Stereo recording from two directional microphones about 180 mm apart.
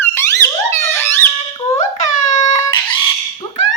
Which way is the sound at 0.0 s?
15° left (ahead or behind).